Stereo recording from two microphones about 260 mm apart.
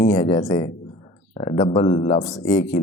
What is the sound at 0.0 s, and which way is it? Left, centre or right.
Speech, centre.